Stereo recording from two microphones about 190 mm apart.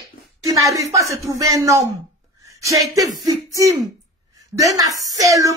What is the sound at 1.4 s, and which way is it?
A woman's voice, 15° right (ahead or behind).